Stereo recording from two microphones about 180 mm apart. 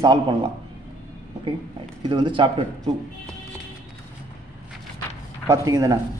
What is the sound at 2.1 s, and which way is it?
Speech, 25° right (ahead or behind).